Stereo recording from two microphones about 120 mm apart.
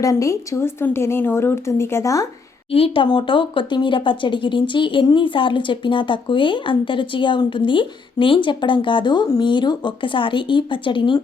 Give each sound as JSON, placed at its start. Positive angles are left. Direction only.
{"t": 0.0, "sound": "speech", "side_deg": 30}
{"t": 2.7, "sound": "speech", "side_deg": 50}